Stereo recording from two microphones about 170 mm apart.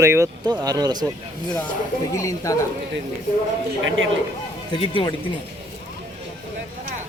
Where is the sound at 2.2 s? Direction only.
20° left (ahead or behind).